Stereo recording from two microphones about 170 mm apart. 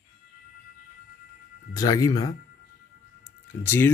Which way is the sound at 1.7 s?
20° left (ahead or behind).